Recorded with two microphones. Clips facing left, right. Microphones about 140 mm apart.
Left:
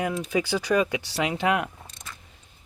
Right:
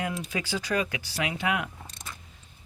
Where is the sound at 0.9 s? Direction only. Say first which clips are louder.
Left 5 dB; 30° left (ahead or behind).